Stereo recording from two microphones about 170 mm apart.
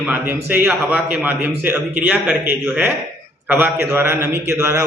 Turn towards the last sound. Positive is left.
turn(degrees=-20)  # may be behind; listen again after turning